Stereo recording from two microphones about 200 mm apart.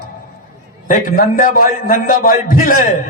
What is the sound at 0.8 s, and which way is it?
A man's voice, 45° left (ahead or behind).